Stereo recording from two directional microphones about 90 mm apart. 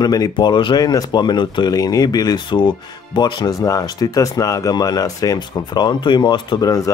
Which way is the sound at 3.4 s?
40° left (ahead or behind).